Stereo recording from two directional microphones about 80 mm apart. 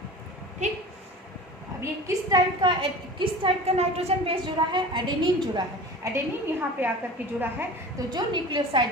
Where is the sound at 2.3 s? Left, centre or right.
Right.